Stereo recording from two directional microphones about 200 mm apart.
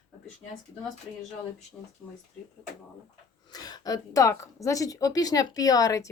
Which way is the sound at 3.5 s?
20° left (ahead or behind).